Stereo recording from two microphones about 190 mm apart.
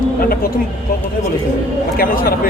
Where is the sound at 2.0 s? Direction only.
50° left (ahead or behind).